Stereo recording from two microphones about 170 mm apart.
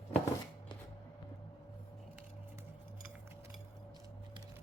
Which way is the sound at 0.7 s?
25° left (ahead or behind).